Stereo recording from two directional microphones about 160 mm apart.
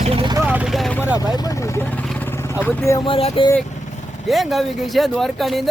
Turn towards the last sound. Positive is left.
turn(degrees=0)  # may be behind; listen again after turning